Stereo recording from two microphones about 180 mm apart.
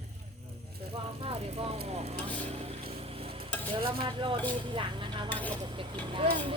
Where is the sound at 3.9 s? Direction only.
30° right (ahead or behind).